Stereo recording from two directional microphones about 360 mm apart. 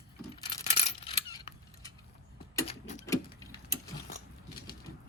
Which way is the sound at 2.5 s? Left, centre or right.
Centre.